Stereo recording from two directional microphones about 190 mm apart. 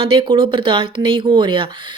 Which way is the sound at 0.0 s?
25° right (ahead or behind).